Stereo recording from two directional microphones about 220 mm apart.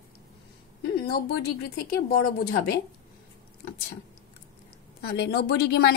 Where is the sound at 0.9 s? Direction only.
45° left (ahead or behind).